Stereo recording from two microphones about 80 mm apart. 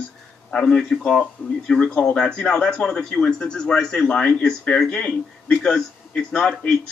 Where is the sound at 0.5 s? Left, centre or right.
Centre.